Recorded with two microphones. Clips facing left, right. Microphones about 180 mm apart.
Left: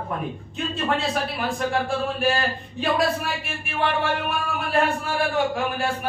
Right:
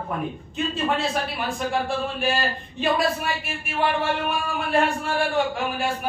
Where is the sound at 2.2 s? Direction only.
Centre (ahead or behind).